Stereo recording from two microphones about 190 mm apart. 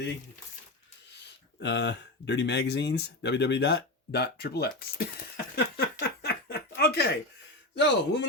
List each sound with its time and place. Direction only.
1.6 s speech: 65° left (ahead or behind)
5.5 s a sound: 60° left (ahead or behind)
7.8 s speech: 65° left (ahead or behind)